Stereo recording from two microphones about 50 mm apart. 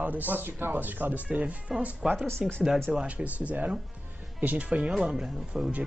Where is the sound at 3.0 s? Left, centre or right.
Right.